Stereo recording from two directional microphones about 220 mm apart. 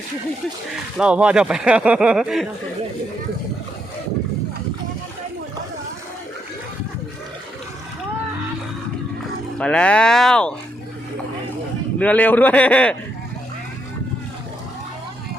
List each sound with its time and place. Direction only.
0.9 s speech: 5° right (ahead or behind)
9.6 s speech: 5° left (ahead or behind)
11.9 s a man's voice: 5° left (ahead or behind)